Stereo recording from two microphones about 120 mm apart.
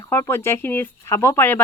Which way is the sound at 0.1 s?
20° left (ahead or behind).